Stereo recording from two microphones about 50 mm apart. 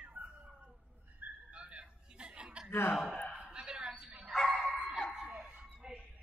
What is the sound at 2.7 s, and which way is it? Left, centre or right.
Speech, left.